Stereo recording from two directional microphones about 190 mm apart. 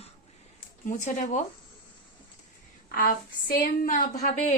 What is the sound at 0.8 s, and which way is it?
Speech, 40° left (ahead or behind).